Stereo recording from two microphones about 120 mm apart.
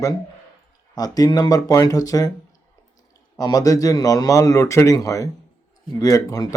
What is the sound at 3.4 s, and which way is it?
Speech, 30° left (ahead or behind).